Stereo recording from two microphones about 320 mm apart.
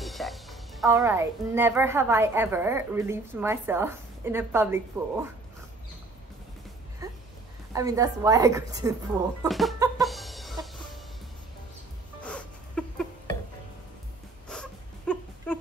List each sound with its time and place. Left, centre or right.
0.0 s music: centre
0.8 s a woman's voice: centre
7.7 s a woman's voice: centre
9.5 s chicken: centre
10.0 s music: centre
12.2 s a sound: centre
14.5 s dog: centre